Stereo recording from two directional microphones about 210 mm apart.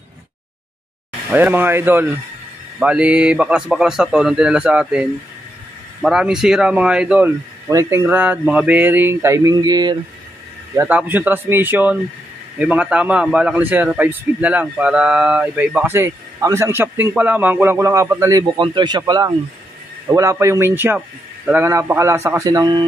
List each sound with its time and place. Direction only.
1.3 s a man's voice: 10° right (ahead or behind)
6.0 s a man's voice: centre (ahead or behind)